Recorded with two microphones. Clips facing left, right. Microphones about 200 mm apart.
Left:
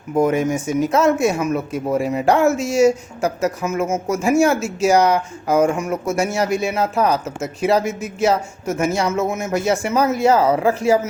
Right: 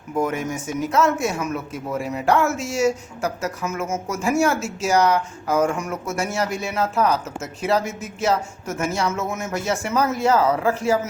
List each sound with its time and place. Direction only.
0.2 s speech: 20° left (ahead or behind)